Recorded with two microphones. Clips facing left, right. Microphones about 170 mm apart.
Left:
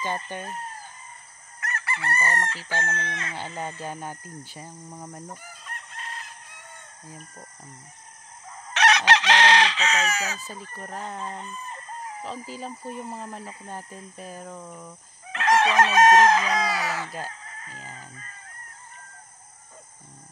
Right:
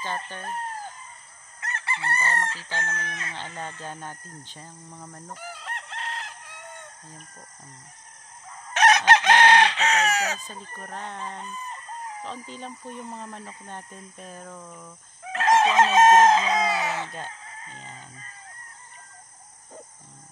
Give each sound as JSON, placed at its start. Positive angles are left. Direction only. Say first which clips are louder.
{"t": 0.3, "sound": "speech", "louder": "left 4 dB", "side_deg": 15}
{"t": 1.6, "sound": "chicken", "louder": "even", "side_deg": -25}
{"t": 2.4, "sound": "chicken", "louder": "left 2 dB", "side_deg": 40}
{"t": 2.8, "sound": "speech", "louder": "left 2 dB", "side_deg": 25}
{"t": 3.3, "sound": "speech", "louder": "left 4 dB", "side_deg": 15}
{"t": 5.3, "sound": "chicken", "louder": "right 4 dB", "side_deg": -75}
{"t": 8.7, "sound": "chicken", "louder": "right 2 dB", "side_deg": -45}
{"t": 10.9, "sound": "speech", "louder": "left 2 dB", "side_deg": 5}
{"t": 15.4, "sound": "chicken", "louder": "right 1 dB", "side_deg": -25}